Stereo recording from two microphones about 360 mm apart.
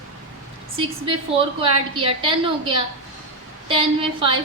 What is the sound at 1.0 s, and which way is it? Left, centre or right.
A woman's voice, centre.